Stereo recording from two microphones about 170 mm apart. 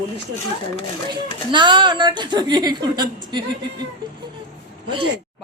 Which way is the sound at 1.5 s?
25° right (ahead or behind).